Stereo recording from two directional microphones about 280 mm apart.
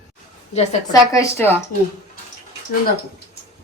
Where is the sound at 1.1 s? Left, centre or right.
Centre.